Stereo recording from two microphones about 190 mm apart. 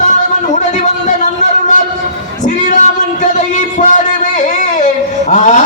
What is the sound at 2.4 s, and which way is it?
Music, 40° left (ahead or behind).